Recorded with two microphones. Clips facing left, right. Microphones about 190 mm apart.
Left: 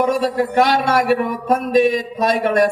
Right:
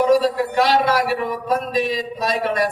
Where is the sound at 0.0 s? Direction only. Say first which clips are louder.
Right 1 dB; 50° left (ahead or behind).